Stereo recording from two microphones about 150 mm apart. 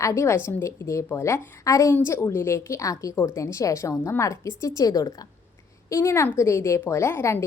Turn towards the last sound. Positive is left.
turn(degrees=15)  # may be behind; listen again after turning